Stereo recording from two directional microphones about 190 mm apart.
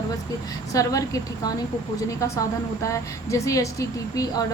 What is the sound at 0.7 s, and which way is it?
A woman's voice, 20° left (ahead or behind).